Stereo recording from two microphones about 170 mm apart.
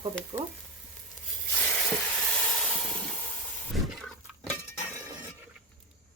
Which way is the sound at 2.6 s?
5° left (ahead or behind).